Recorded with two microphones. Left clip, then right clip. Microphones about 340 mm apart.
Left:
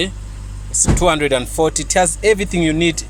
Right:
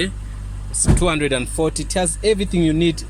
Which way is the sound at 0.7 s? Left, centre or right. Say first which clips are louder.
Left 5 dB; left.